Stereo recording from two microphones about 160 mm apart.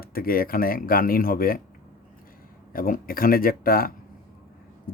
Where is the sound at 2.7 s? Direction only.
60° left (ahead or behind).